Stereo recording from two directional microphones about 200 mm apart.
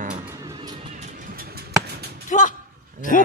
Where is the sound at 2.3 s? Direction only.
35° left (ahead or behind).